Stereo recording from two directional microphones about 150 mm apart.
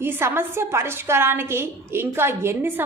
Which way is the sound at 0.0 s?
15° right (ahead or behind).